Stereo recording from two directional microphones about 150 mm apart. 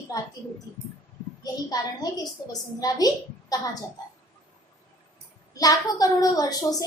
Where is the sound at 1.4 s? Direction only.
25° left (ahead or behind).